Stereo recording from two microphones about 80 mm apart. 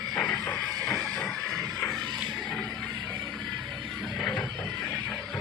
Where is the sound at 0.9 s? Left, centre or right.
Centre.